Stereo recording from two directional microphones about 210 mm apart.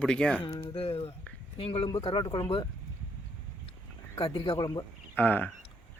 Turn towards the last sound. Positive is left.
turn(degrees=5)  # may be behind; listen again after turning